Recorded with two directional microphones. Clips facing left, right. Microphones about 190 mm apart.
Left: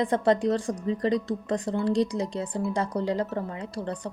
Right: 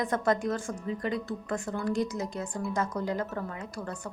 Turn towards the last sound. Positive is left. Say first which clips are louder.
# left 5 dB
turn(degrees=30)  # may be behind; listen again after turning